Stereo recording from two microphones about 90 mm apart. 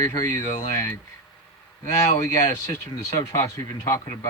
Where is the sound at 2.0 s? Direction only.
30° left (ahead or behind).